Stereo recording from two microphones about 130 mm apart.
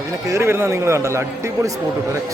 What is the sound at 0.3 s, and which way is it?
Speech, 20° right (ahead or behind).